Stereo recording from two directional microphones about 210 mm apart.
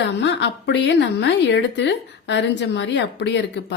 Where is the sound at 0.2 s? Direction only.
55° left (ahead or behind).